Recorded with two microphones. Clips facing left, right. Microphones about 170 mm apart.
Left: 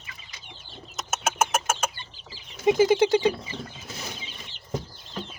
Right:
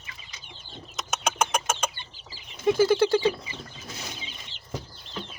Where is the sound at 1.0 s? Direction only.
5° left (ahead or behind).